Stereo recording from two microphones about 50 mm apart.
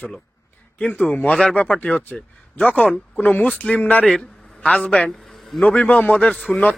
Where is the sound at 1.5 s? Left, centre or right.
Left.